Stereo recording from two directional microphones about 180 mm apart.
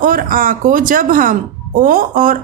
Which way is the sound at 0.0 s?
50° right (ahead or behind).